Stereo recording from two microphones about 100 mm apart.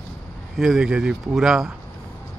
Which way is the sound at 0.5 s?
5° right (ahead or behind).